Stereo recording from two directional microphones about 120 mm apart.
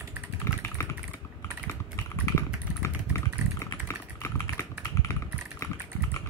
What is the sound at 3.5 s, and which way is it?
Typing, 25° left (ahead or behind).